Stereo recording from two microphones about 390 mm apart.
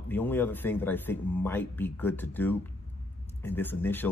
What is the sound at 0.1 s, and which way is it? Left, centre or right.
Speech, centre.